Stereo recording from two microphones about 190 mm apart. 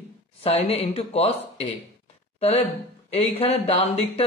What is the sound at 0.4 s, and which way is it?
Speech, 30° left (ahead or behind).